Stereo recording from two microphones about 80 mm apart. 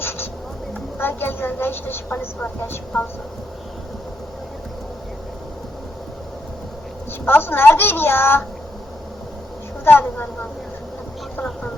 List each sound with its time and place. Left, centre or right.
0.0 s a sound: left
0.9 s a woman's voice: left
7.3 s a woman's voice: left
9.8 s a woman's voice: left